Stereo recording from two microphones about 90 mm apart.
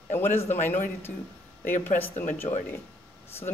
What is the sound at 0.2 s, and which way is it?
A man's voice, 25° left (ahead or behind).